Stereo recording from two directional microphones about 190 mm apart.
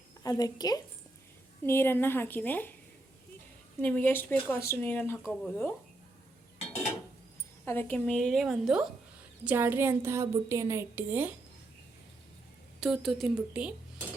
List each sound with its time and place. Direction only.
0.2 s a woman's voice: 20° left (ahead or behind)
3.8 s a woman's voice: 10° left (ahead or behind)
7.6 s a woman's voice: 10° left (ahead or behind); by 11.3 s 10° right (ahead or behind)
12.8 s a woman's voice: centre (ahead or behind)